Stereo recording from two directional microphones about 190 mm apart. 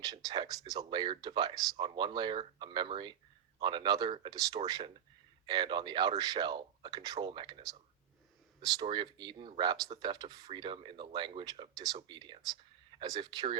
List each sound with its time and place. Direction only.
0.0 s speech: 20° right (ahead or behind)
8.7 s speech: 25° right (ahead or behind)